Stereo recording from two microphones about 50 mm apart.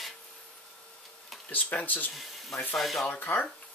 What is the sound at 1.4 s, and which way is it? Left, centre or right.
Speech, left.